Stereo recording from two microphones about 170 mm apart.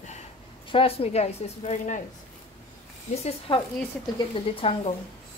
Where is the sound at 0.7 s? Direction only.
35° left (ahead or behind).